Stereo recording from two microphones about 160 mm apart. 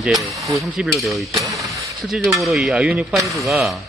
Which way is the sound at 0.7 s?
Centre (ahead or behind).